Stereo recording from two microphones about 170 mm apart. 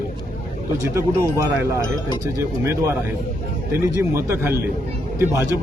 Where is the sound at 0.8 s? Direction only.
15° right (ahead or behind).